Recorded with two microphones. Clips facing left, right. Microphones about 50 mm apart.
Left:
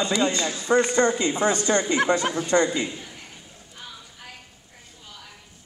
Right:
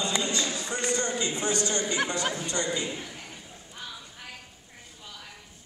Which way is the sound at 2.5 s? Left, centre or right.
Left.